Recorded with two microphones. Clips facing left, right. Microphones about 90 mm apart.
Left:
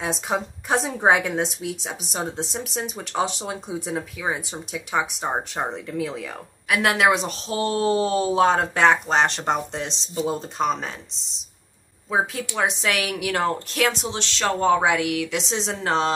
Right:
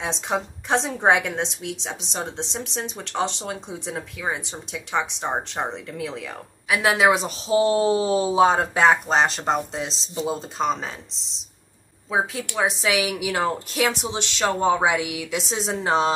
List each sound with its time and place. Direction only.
0.0 s a woman's voice: 5° left (ahead or behind); by 16.1 s 10° right (ahead or behind)